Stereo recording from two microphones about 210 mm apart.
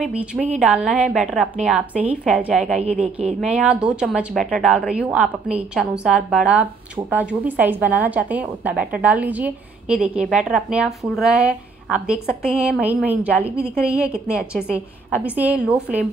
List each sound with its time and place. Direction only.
0.0 s a woman's voice: 5° right (ahead or behind)
2.8 s a woman's voice: 30° right (ahead or behind)
3.5 s a woman's voice: 5° right (ahead or behind)